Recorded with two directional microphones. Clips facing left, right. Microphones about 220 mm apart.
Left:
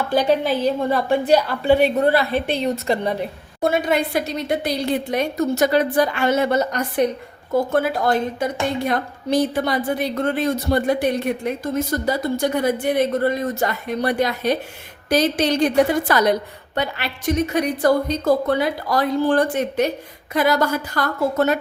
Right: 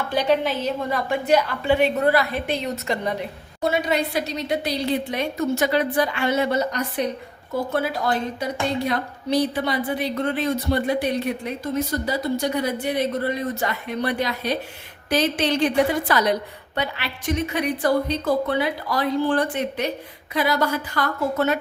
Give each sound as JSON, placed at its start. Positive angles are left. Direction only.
{"t": 0.1, "sound": "a woman's voice", "side_deg": 40}
{"t": 3.6, "sound": "a woman's voice", "side_deg": 50}